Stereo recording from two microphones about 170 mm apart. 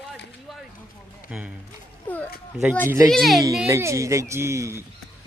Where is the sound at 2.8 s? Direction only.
15° right (ahead or behind).